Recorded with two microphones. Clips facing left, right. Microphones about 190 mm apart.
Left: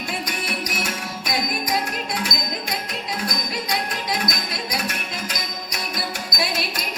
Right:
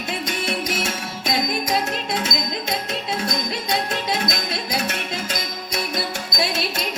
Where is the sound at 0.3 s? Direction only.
25° right (ahead or behind).